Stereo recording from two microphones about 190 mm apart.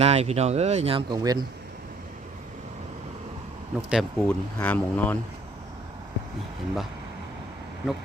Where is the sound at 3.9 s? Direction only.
Centre (ahead or behind).